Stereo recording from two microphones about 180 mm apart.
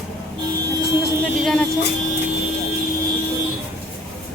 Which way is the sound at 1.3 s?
5° left (ahead or behind).